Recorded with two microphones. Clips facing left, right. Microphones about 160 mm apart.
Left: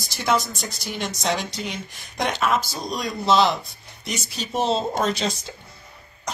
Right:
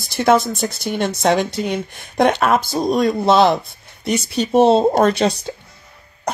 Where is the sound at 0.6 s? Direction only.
55° right (ahead or behind).